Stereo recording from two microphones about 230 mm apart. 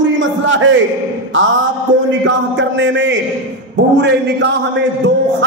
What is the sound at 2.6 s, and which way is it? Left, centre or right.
A man's voice, right.